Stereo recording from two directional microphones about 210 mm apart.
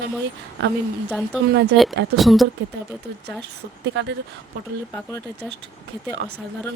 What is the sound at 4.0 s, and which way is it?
Speech, 55° right (ahead or behind).